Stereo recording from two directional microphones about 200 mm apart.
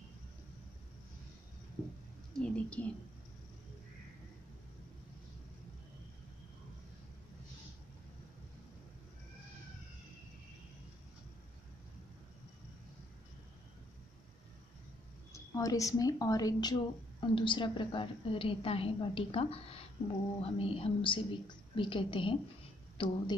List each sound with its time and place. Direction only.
2.3 s speech: 5° left (ahead or behind)
15.3 s a woman's voice: 15° left (ahead or behind)